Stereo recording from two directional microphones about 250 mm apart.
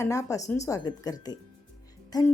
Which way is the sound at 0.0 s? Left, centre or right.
Centre.